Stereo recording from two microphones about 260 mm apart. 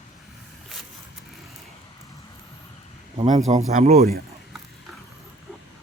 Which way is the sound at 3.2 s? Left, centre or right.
Right.